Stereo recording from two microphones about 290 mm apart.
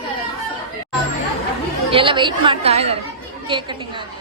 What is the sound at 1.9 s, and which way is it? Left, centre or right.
A woman's voice, centre.